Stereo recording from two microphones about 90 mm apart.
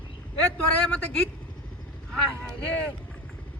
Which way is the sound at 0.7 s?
15° left (ahead or behind).